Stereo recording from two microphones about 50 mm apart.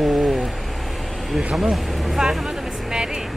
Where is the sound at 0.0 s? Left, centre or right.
Centre.